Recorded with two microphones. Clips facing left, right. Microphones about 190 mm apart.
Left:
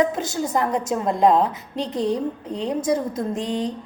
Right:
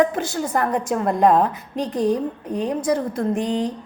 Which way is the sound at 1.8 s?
10° right (ahead or behind).